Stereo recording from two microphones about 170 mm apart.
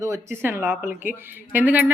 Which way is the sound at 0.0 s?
15° right (ahead or behind).